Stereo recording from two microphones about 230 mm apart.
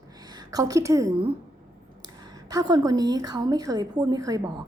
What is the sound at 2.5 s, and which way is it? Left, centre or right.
A woman's voice, centre.